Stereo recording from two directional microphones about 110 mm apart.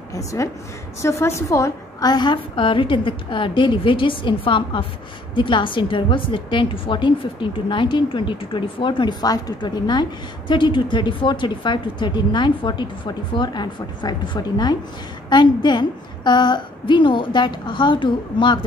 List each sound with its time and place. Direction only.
0.1 s a woman's voice: 30° left (ahead or behind); by 18.6 s 45° left (ahead or behind)